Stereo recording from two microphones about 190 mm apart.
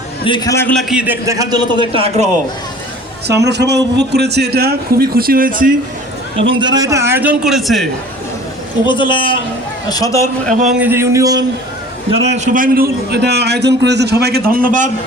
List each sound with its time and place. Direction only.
0.3 s a man's voice: 20° left (ahead or behind)
0.8 s a man's voice: 5° right (ahead or behind); by 2.3 s 35° right (ahead or behind)
3.2 s a man's voice: 60° right (ahead or behind); by 5.7 s 45° right (ahead or behind)
6.5 s a man's voice: 25° right (ahead or behind); by 7.9 s centre (ahead or behind)
8.9 s a man's voice: 25° left (ahead or behind)
10.7 s a man's voice: 10° right (ahead or behind)
12.1 s a man's voice: 35° right (ahead or behind)